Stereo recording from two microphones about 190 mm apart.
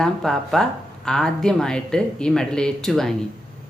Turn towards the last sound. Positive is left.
turn(degrees=0)  # may be behind; listen again after turning